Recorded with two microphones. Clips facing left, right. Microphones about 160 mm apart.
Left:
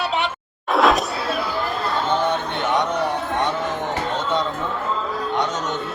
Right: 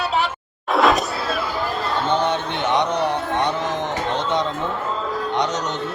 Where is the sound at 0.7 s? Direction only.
Centre (ahead or behind).